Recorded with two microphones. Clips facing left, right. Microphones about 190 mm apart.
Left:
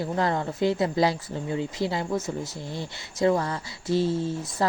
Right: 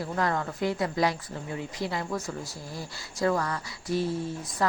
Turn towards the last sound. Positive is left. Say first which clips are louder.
# left 4 dB
turn(degrees=25)  # may be behind; listen again after turning